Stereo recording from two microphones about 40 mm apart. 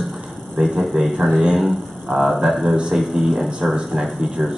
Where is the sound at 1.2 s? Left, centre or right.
Centre.